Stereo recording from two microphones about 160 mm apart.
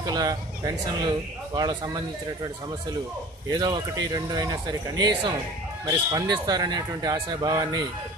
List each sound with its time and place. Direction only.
0.0 s speech: 25° right (ahead or behind)
3.5 s speech: 25° right (ahead or behind)